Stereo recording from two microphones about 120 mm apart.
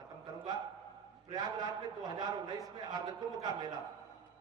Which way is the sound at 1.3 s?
35° right (ahead or behind).